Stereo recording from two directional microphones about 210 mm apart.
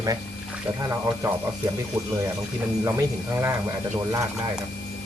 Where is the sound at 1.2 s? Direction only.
15° right (ahead or behind).